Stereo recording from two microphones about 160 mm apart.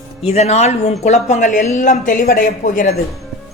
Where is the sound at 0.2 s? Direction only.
40° left (ahead or behind).